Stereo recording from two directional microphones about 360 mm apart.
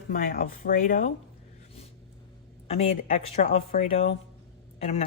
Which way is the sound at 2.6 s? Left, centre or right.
Centre.